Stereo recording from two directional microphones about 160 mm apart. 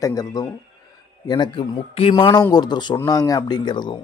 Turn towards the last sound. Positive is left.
turn(degrees=30)  # may be behind; listen again after turning